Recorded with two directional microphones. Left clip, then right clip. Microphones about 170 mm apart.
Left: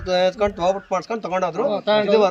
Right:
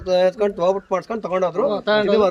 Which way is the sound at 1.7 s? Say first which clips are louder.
Even; 5° left (ahead or behind).